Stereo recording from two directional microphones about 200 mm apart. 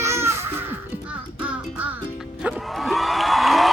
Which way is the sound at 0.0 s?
15° right (ahead or behind).